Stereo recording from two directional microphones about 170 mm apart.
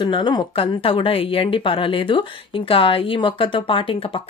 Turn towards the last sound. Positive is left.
turn(degrees=30)  # may be behind; listen again after turning